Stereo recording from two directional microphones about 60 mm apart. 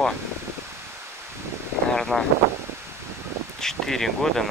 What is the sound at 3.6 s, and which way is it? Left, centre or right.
Speech, centre.